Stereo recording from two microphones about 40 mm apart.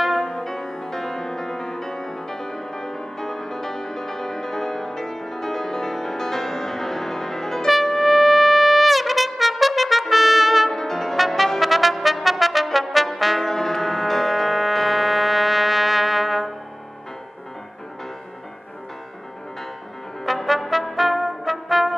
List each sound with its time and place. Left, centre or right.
0.2 s music: centre
7.7 s trumpet: centre
10.8 s brass instrument: centre
20.2 s brass instrument: centre